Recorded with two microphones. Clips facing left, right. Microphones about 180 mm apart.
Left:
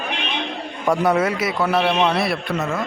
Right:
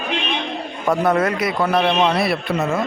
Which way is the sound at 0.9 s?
10° left (ahead or behind).